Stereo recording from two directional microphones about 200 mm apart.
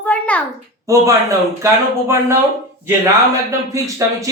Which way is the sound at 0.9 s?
15° right (ahead or behind).